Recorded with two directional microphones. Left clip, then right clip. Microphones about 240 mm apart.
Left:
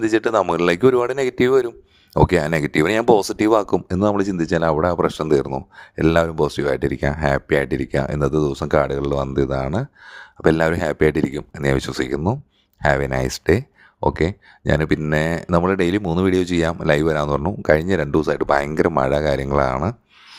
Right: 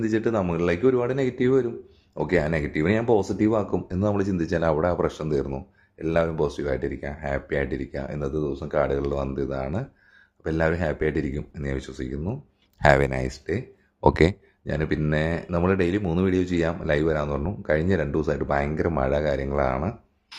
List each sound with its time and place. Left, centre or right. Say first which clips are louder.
0.0 s speech: left 7 dB; left
12.8 s speech: left 1 dB; centre
13.4 s speech: left 11 dB; left
14.0 s speech: even; centre
14.6 s speech: left 8 dB; left